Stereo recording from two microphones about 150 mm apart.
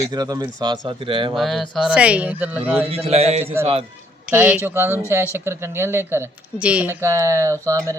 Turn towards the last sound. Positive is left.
turn(degrees=-20)  # may be behind; listen again after turning